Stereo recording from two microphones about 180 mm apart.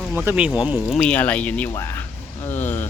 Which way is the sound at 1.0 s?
10° left (ahead or behind).